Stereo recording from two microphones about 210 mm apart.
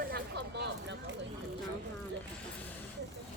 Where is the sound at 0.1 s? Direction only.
55° right (ahead or behind).